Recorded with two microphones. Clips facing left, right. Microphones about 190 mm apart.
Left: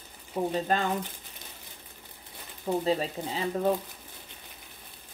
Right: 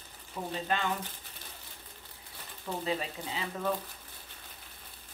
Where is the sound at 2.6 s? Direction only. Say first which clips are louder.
Left 7 dB; 40° left (ahead or behind).